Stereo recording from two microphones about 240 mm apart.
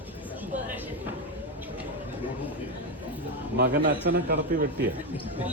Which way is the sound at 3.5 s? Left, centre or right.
Right.